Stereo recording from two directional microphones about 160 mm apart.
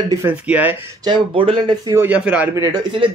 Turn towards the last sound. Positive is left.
turn(degrees=-25)  # may be behind; listen again after turning